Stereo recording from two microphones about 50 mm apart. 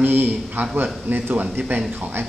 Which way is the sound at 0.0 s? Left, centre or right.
Right.